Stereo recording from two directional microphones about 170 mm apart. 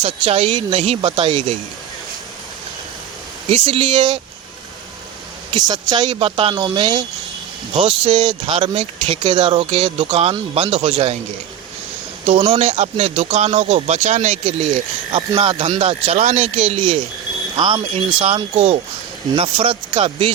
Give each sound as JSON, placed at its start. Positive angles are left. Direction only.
{"t": 0.0, "sound": "a man's voice", "side_deg": -35}
{"t": 3.5, "sound": "a man's voice", "side_deg": -30}
{"t": 5.5, "sound": "a man's voice", "side_deg": -25}
{"t": 12.2, "sound": "a man's voice", "side_deg": -35}